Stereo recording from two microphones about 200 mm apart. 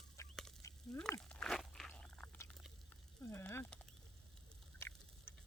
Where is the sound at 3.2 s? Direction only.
15° left (ahead or behind).